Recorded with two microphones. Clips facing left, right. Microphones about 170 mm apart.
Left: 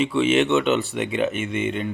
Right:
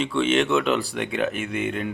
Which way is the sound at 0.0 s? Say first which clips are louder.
Left 2 dB; 5° left (ahead or behind).